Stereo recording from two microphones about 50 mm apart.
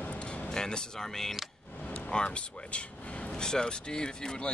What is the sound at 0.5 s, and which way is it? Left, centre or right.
Speech, centre.